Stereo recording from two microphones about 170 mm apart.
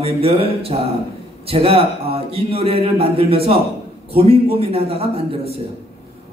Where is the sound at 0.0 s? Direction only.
35° right (ahead or behind).